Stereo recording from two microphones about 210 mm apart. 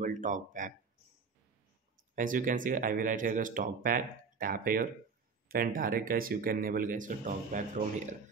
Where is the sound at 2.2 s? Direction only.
40° right (ahead or behind).